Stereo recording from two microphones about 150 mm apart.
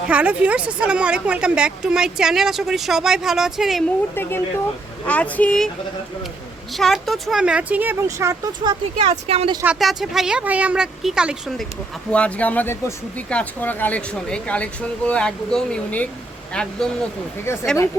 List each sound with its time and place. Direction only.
0.1 s a woman's voice: 10° right (ahead or behind)
4.1 s speech: 15° left (ahead or behind)
6.7 s speech: centre (ahead or behind); by 8.8 s 20° right (ahead or behind)
9.0 s speech: 40° right (ahead or behind)
9.6 s a woman's voice: centre (ahead or behind)
12.1 s a woman's voice: 10° left (ahead or behind)
17.4 s speech: 15° left (ahead or behind)